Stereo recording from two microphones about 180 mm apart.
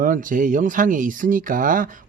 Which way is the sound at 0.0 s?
50° right (ahead or behind).